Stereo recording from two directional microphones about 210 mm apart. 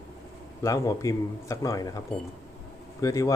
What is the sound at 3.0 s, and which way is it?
Speech, 15° left (ahead or behind).